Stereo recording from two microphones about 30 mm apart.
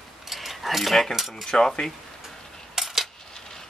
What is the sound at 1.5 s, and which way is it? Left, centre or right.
Speech, left.